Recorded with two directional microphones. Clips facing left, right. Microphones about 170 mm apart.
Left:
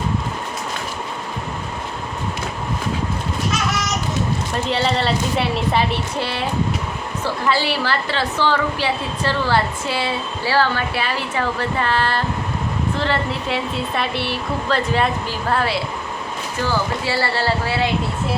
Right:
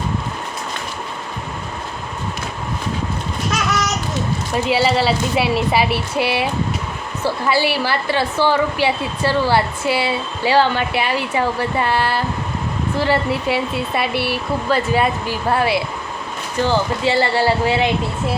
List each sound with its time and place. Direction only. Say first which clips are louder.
4.5 s a woman's voice: right 5 dB; 5° right (ahead or behind)